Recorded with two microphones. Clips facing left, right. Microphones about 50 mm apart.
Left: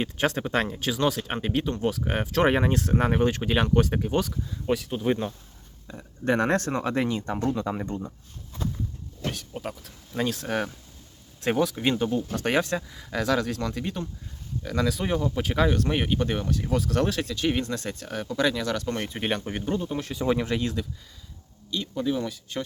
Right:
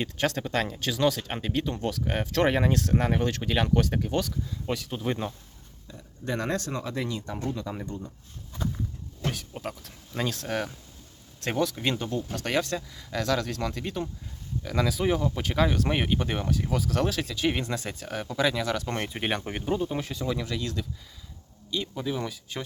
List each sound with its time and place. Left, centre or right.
0.0 s speech: centre
5.9 s speech: left
9.2 s speech: centre
20.2 s speech: left
21.9 s speech: centre